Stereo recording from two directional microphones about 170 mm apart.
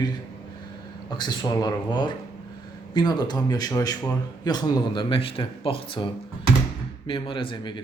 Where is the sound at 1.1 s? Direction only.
25° left (ahead or behind).